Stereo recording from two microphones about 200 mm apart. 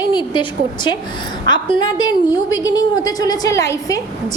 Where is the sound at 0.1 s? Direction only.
25° left (ahead or behind).